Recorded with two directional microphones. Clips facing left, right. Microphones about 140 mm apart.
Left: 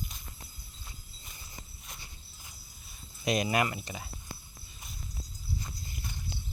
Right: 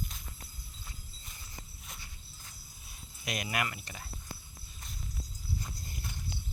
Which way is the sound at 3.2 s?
30° left (ahead or behind).